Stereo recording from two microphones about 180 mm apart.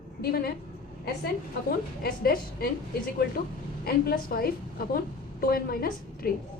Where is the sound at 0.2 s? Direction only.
60° left (ahead or behind).